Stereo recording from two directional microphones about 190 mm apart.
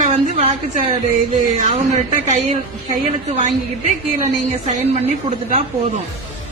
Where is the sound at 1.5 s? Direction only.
35° right (ahead or behind).